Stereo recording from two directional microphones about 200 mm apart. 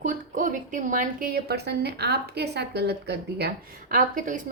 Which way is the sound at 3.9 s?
40° right (ahead or behind).